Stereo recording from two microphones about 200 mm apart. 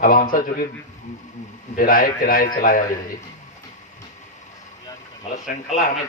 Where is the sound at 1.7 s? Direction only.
45° left (ahead or behind).